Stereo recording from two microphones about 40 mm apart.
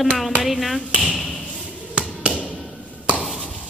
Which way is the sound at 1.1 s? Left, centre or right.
Centre.